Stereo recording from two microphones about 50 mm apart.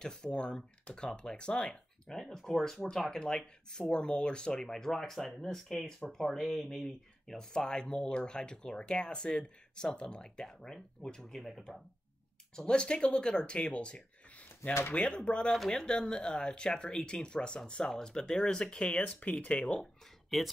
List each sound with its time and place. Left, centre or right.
0.0 s speech: centre
12.5 s speech: centre
15.8 s speech: centre
20.3 s speech: centre